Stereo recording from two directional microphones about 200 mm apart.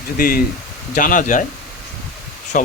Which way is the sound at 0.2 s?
45° left (ahead or behind).